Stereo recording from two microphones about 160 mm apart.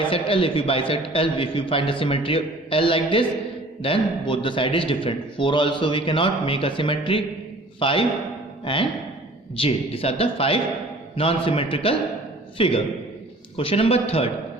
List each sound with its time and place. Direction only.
0.1 s a man's voice: 35° left (ahead or behind)